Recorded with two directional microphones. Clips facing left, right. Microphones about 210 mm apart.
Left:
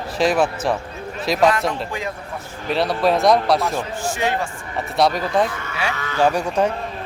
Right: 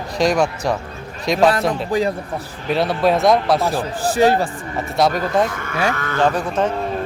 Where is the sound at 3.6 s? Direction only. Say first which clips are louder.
Right 3 dB; 35° right (ahead or behind).